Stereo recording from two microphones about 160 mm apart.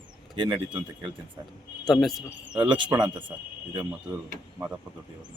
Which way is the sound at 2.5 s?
30° right (ahead or behind).